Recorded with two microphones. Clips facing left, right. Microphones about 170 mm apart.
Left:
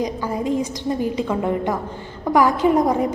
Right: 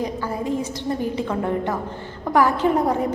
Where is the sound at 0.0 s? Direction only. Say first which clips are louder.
Left 2 dB; 15° left (ahead or behind).